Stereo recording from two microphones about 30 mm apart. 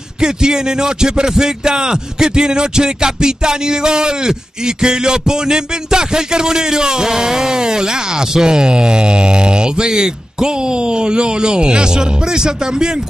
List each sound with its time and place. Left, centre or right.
0.2 s a man's voice: right